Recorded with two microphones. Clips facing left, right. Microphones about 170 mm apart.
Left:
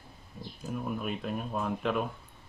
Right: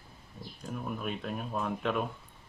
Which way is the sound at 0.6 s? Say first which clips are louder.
Left 2 dB; 5° left (ahead or behind).